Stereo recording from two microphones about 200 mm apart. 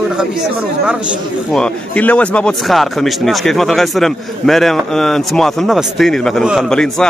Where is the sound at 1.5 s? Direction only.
5° left (ahead or behind).